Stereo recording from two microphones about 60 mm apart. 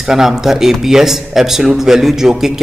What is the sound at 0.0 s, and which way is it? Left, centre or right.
A man's voice, centre.